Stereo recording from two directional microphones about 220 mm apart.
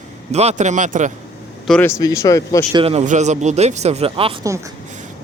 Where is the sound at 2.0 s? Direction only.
15° left (ahead or behind).